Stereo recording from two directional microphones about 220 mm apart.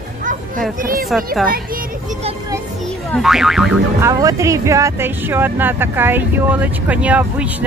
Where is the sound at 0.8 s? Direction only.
40° right (ahead or behind).